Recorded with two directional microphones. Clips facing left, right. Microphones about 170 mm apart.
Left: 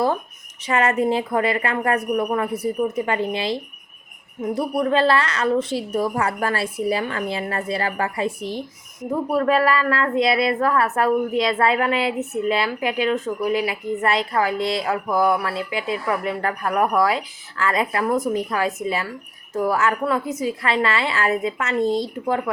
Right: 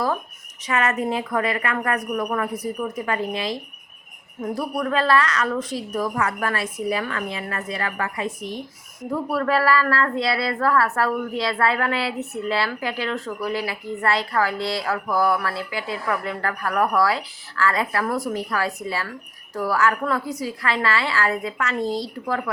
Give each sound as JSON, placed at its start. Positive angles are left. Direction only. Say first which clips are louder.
{"t": 0.6, "sound": "a woman's voice", "louder": "left 3 dB", "side_deg": 30}
{"t": 9.0, "sound": "a woman's voice", "louder": "left 3 dB", "side_deg": 20}